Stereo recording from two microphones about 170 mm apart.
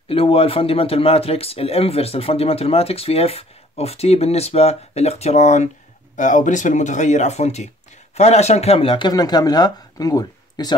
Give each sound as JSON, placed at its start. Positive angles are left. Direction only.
{"t": 0.1, "sound": "speech", "side_deg": 35}